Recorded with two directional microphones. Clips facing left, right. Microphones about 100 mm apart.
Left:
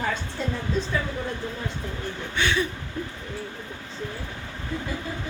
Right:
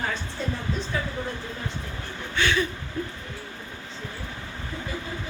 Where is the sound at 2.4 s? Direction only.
20° left (ahead or behind).